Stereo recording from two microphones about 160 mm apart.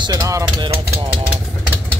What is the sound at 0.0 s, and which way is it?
Speech, 25° right (ahead or behind).